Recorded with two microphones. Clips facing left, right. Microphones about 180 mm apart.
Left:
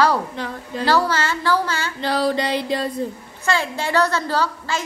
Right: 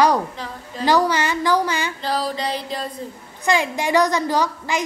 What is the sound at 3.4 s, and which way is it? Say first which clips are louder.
A woman's voice: right 2 dB; 15° right (ahead or behind).